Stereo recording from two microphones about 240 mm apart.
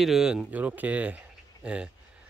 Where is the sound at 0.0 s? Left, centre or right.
Centre.